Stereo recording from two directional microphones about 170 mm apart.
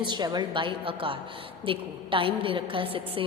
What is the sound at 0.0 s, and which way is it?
A woman's voice, 25° right (ahead or behind).